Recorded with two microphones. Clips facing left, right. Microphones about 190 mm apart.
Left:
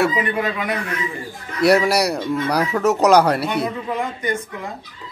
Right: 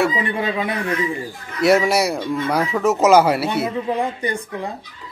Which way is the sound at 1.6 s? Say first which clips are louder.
Even; centre (ahead or behind).